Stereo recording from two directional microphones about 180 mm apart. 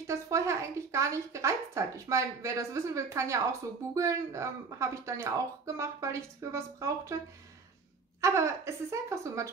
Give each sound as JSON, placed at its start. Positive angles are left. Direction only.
{"t": 0.0, "sound": "a woman's voice", "side_deg": -15}
{"t": 8.2, "sound": "a woman's voice", "side_deg": -15}